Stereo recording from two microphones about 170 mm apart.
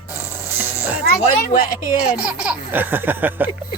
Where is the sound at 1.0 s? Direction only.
60° left (ahead or behind).